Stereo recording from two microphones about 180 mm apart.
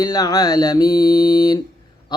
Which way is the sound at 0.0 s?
20° left (ahead or behind).